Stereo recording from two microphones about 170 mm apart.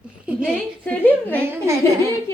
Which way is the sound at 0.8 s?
10° left (ahead or behind).